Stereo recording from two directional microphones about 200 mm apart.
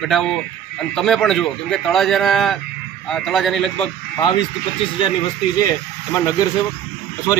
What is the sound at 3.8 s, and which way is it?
Speech, 25° left (ahead or behind).